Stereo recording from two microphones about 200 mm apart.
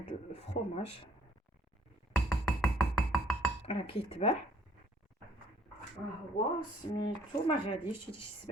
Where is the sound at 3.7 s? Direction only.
25° left (ahead or behind).